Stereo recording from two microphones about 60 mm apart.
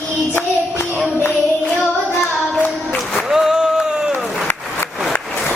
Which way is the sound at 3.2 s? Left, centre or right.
Centre.